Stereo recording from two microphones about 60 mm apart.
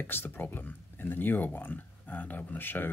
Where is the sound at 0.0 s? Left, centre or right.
Left.